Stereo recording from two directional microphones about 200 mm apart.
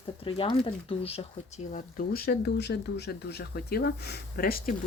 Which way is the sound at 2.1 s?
50° left (ahead or behind).